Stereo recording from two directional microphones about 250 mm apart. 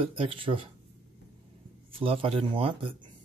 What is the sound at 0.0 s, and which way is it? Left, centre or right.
Speech, right.